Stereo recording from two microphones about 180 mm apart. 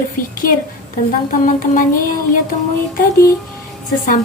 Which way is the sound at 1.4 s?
45° left (ahead or behind).